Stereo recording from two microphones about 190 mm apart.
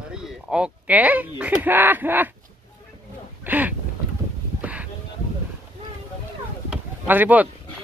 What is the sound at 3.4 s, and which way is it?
Speech, 10° right (ahead or behind).